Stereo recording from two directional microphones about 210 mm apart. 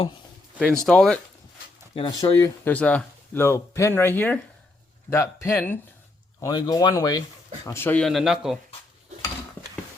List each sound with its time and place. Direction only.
0.6 s speech: centre (ahead or behind)
2.0 s speech: 25° left (ahead or behind)
2.6 s speech: 5° left (ahead or behind)